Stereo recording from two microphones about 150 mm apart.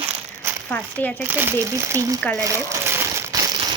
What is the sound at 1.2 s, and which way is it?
Speech, 15° right (ahead or behind).